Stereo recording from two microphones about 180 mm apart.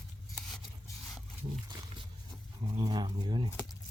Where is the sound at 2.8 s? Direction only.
25° right (ahead or behind).